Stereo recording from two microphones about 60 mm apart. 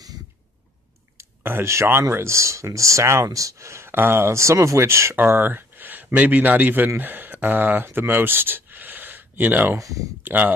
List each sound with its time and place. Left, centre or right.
1.4 s speech: right
3.3 s speech: right
3.9 s speech: right
5.1 s a man's voice: right
9.8 s speech: right
10.2 s speech: right